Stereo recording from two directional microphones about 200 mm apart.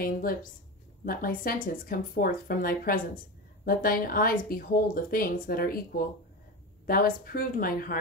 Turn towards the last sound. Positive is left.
turn(degrees=45)  # may be behind; listen again after turning